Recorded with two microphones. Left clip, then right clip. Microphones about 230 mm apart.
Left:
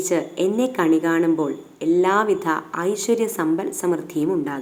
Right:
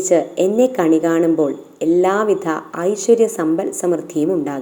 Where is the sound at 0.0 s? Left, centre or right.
Centre.